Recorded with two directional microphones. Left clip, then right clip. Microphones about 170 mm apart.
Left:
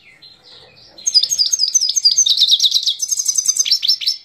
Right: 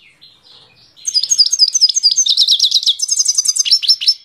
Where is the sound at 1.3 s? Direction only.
20° right (ahead or behind).